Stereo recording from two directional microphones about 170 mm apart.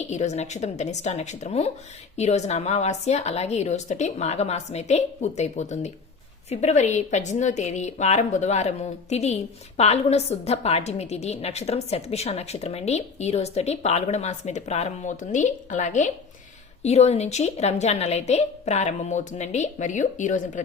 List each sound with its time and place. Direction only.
0.0 s a woman's voice: 40° left (ahead or behind)